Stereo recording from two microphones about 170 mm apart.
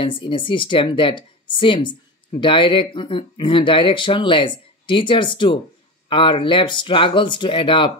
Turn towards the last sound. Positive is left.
turn(degrees=30)  # may be behind; listen again after turning